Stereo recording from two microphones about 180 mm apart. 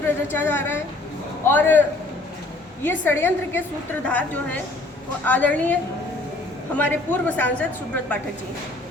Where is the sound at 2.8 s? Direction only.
10° left (ahead or behind).